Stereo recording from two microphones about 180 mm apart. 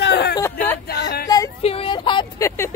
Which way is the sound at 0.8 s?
65° left (ahead or behind).